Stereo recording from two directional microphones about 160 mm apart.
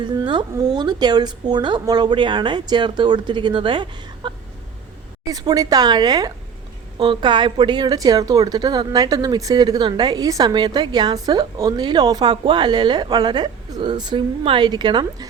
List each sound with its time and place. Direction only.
0.0 s a woman's voice: 30° right (ahead or behind)